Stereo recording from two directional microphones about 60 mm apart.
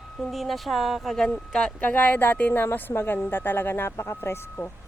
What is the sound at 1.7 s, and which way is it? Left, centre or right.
Speech, left.